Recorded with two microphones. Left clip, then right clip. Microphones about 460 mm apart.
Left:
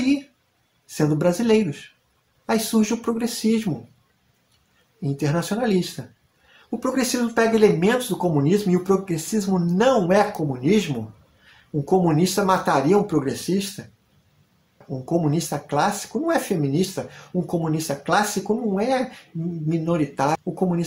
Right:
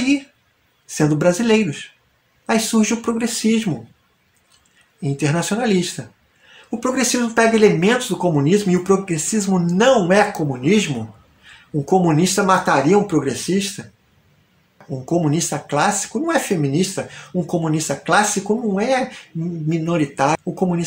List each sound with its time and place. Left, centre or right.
0.8 s speech: left
5.0 s speech: left
14.9 s speech: left